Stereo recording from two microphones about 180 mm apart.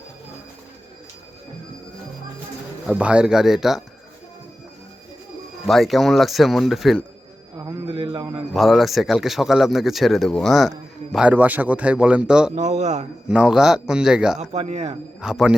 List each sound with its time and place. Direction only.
2.8 s speech: 5° right (ahead or behind)
5.6 s speech: centre (ahead or behind)
7.5 s a sound: 20° right (ahead or behind)
8.5 s a man's voice: centre (ahead or behind)
12.5 s a man's voice: 40° right (ahead or behind)
13.2 s speech: 5° right (ahead or behind)
14.5 s a man's voice: 35° right (ahead or behind)
15.2 s speech: 5° right (ahead or behind)